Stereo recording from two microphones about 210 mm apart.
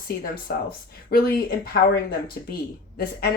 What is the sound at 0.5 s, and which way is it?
Speech, 50° left (ahead or behind).